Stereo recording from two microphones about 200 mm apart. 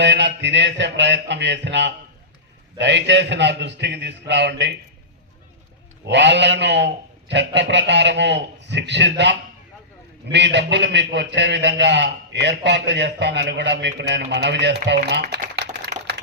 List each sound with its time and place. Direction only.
0.0 s a man's voice: 60° right (ahead or behind)
6.1 s a man's voice: 60° right (ahead or behind)